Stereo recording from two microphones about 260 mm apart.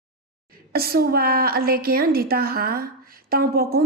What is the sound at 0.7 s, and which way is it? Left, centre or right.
A woman's voice, right.